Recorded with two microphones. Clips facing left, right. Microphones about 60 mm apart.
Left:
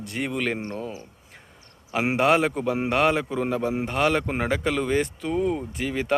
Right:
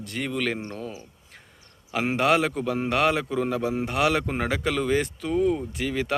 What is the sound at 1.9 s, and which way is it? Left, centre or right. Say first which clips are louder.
A man's voice: left 1 dB; centre.